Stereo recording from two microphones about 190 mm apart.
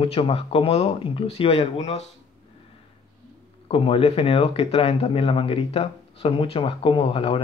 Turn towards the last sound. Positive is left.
turn(degrees=30)  # may be behind; listen again after turning